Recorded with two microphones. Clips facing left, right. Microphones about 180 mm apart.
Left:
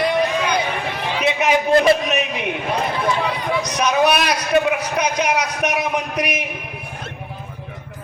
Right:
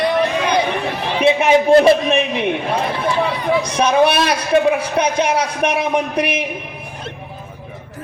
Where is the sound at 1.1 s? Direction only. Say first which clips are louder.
Right 6 dB; 30° right (ahead or behind).